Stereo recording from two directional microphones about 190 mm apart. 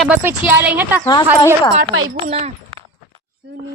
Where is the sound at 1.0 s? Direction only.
20° left (ahead or behind).